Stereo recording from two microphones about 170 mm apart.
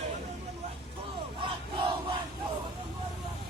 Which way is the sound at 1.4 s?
30° right (ahead or behind).